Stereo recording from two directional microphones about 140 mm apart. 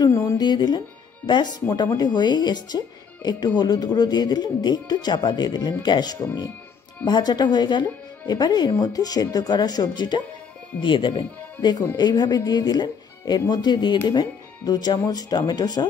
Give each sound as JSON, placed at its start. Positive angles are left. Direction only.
{"t": 0.0, "sound": "speech", "side_deg": 20}